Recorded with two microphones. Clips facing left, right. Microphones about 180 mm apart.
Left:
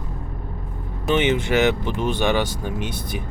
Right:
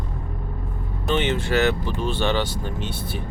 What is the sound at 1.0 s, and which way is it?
Speech, 15° left (ahead or behind).